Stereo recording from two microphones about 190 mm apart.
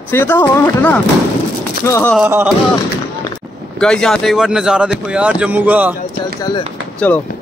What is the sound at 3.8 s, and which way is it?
Speech, 5° left (ahead or behind).